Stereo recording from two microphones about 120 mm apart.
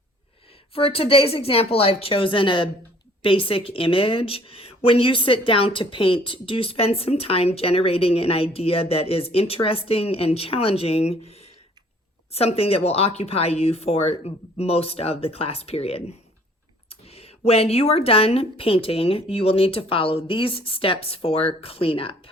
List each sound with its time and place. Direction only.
0.7 s speech: 50° left (ahead or behind)